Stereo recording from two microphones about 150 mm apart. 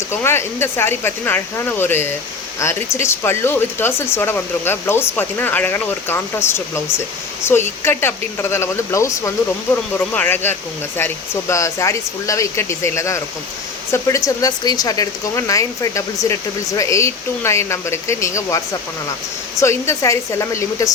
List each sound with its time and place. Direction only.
0.1 s speech: 15° left (ahead or behind)